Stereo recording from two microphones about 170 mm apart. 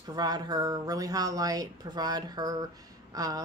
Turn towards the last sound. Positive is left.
turn(degrees=-20)  # may be behind; listen again after turning